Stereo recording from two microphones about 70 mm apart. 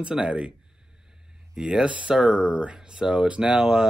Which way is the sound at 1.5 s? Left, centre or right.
Centre.